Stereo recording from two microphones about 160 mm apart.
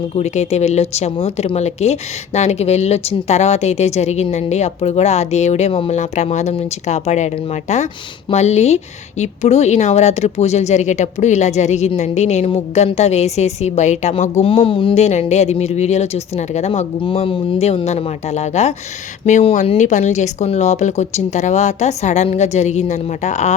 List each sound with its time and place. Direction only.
0.2 s speech: 45° left (ahead or behind)